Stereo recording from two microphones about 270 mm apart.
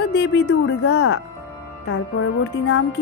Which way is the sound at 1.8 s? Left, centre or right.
Left.